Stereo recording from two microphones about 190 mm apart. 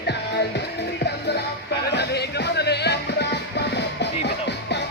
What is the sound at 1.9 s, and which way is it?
Music, 60° left (ahead or behind).